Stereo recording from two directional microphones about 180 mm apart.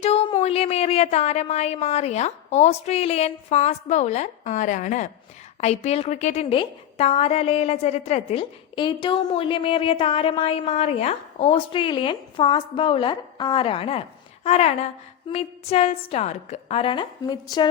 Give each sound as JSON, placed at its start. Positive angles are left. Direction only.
{"t": 0.0, "sound": "a woman's voice", "side_deg": 30}